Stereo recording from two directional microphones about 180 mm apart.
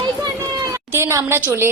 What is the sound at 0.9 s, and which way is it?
Speech, 15° right (ahead or behind).